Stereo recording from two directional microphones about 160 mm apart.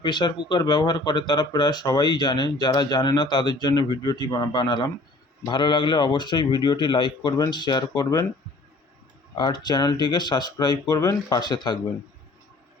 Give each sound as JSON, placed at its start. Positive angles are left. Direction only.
{"t": 0.0, "sound": "speech", "side_deg": 30}
{"t": 9.4, "sound": "speech", "side_deg": 25}